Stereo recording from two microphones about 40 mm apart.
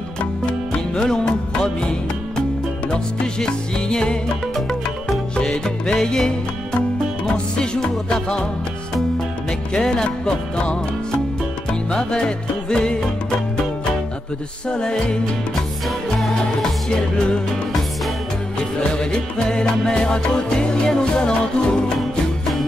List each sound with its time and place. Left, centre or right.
0.2 s music: left
4.6 s music: centre
5.3 s music: left
7.5 s music: left
9.8 s music: centre
11.9 s music: left
14.7 s music: left
18.8 s music: left